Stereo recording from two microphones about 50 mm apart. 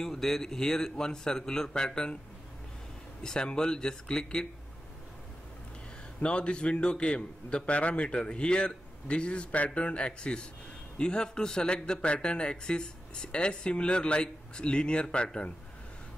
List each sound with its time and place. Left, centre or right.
0.0 s a man's voice: centre
3.2 s a man's voice: centre
6.2 s a man's voice: left